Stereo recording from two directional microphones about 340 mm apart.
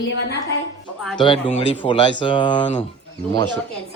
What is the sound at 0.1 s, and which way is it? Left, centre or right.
Speech, left.